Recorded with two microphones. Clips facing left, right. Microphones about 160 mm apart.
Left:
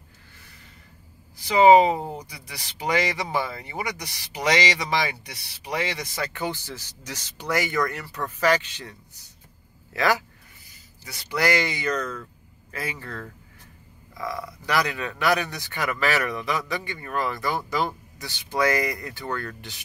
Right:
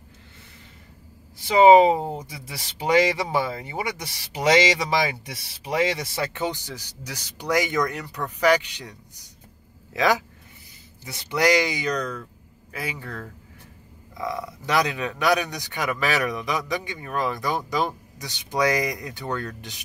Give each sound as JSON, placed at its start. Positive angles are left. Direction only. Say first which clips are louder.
{"t": 1.9, "sound": "speech", "louder": "right 4 dB", "side_deg": -25}
{"t": 11.1, "sound": "speech", "louder": "right 3 dB", "side_deg": -25}